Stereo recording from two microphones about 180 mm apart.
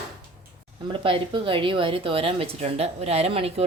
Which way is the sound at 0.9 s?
30° right (ahead or behind).